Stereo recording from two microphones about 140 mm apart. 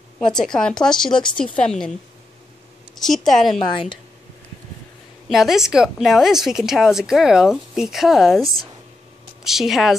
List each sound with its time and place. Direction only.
0.3 s a woman's voice: 5° left (ahead or behind)
3.0 s a woman's voice: centre (ahead or behind)
5.3 s a woman's voice: 5° right (ahead or behind)